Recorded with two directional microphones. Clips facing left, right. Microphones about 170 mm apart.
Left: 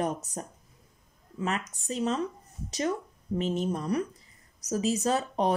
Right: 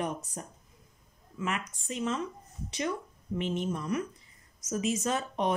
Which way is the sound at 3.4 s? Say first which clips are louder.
Left 3 dB; 40° left (ahead or behind).